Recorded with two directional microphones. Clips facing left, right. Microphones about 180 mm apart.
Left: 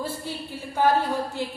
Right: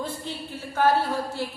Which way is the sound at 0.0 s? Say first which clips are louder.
Left 1 dB; 10° left (ahead or behind).